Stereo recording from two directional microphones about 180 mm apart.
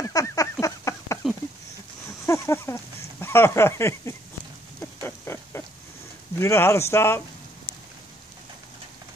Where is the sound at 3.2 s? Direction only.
15° left (ahead or behind).